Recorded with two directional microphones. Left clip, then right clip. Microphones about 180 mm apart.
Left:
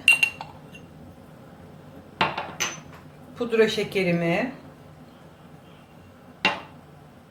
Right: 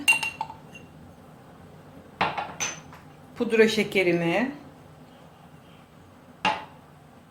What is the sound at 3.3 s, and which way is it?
A woman's voice, 40° right (ahead or behind).